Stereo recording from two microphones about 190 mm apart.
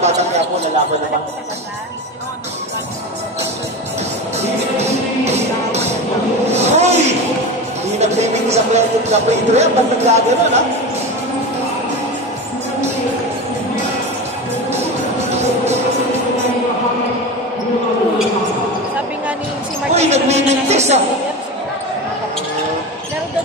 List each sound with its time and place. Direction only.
0.0 s speech: 35° right (ahead or behind)
4.4 s music: 35° right (ahead or behind)
6.5 s a sound: 35° right (ahead or behind)
7.9 s speech: 35° right (ahead or behind)
19.9 s a man's voice: 35° right (ahead or behind)